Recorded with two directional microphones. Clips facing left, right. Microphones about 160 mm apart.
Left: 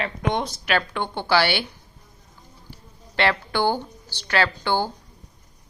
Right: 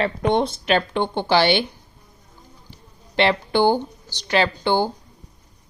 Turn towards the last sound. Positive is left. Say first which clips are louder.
# right 3 dB
turn(degrees=-20)  # may be behind; listen again after turning